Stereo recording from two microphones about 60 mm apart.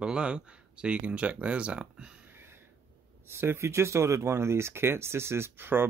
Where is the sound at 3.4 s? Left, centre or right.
Right.